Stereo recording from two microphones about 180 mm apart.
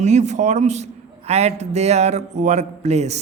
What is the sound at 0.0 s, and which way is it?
A man's voice, 40° right (ahead or behind).